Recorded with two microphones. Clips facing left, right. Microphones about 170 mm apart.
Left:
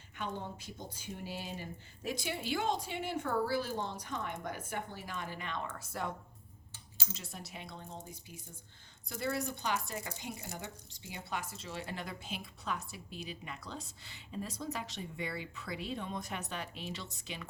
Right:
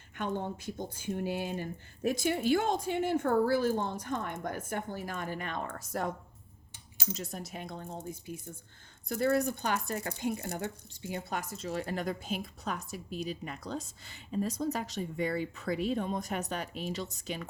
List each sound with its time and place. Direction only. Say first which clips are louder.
0.2 s speech: right 6 dB; 55° right (ahead or behind)